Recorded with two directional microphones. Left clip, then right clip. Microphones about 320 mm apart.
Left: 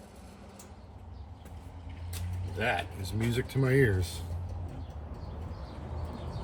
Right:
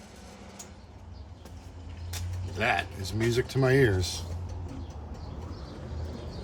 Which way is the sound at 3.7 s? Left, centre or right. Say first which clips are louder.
Right 3 dB; centre.